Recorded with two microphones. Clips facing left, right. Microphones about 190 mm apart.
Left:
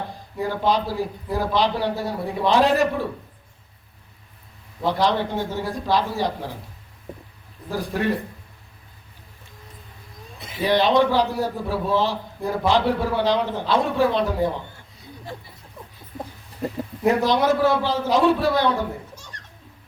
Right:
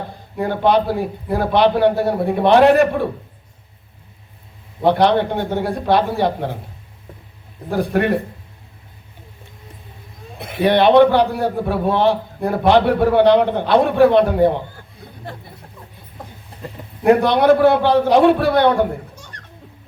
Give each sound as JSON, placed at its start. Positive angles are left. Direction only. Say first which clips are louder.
{"t": 0.3, "sound": "a man's voice", "louder": "right 6 dB", "side_deg": -60}
{"t": 4.8, "sound": "a man's voice", "louder": "right 7 dB", "side_deg": -60}
{"t": 7.7, "sound": "a man's voice", "louder": "right 6 dB", "side_deg": -60}
{"t": 10.3, "sound": "a man's voice", "louder": "right 5 dB", "side_deg": -60}
{"t": 15.0, "sound": "a sound", "louder": "right 2 dB", "side_deg": -60}
{"t": 17.0, "sound": "a man's voice", "louder": "right 6 dB", "side_deg": -60}